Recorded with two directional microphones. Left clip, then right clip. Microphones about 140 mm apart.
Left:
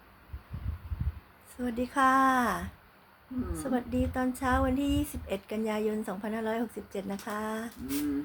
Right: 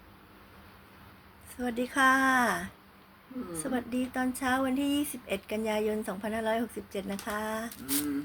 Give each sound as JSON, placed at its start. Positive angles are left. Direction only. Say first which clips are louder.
{"t": 1.5, "sound": "speech", "louder": "even", "side_deg": 0}